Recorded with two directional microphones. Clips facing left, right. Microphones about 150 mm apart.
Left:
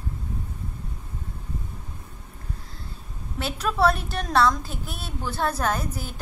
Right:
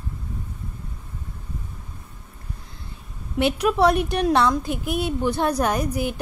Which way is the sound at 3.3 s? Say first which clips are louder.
Right 6 dB; 15° right (ahead or behind).